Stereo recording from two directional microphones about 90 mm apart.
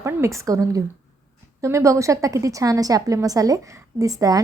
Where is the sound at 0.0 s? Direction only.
35° right (ahead or behind).